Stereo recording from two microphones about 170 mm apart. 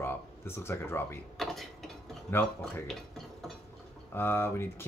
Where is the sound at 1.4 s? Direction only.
Centre (ahead or behind).